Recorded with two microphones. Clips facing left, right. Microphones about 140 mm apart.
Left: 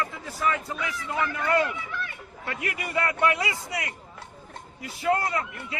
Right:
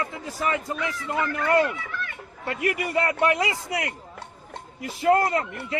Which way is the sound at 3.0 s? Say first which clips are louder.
Right 1 dB; 30° right (ahead or behind).